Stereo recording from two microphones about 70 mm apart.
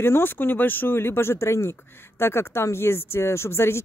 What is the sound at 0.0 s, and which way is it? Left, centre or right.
Speech, left.